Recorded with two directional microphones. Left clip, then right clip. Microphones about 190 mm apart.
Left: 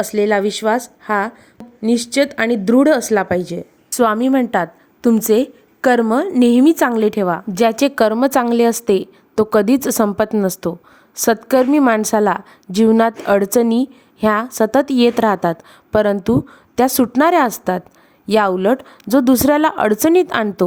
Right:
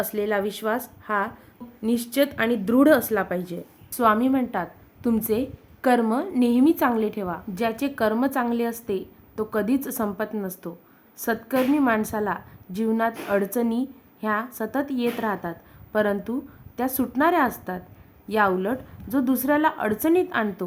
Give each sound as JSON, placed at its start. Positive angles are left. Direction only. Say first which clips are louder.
{"t": 0.0, "sound": "a woman's voice", "louder": "left 9 dB", "side_deg": 40}